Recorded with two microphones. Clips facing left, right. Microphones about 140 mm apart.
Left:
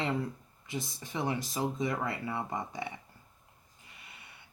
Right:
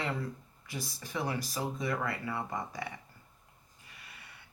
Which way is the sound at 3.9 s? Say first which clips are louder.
Even; 20° left (ahead or behind).